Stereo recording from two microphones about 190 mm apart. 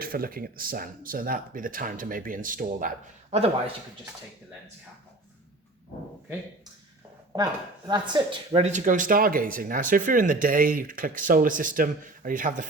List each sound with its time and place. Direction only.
0.0 s speech: 50° right (ahead or behind); by 3.8 s 30° right (ahead or behind)
7.9 s speech: 25° right (ahead or behind)
8.6 s speech: 40° right (ahead or behind)